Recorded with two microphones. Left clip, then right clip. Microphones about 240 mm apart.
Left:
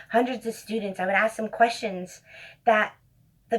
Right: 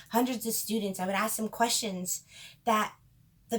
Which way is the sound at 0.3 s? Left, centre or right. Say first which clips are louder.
Left 3 dB; right.